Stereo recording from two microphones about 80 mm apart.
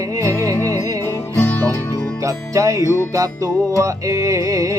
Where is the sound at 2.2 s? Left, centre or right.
Right.